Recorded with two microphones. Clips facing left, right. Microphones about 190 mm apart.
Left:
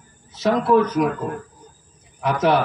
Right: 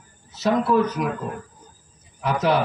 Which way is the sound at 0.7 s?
55° left (ahead or behind).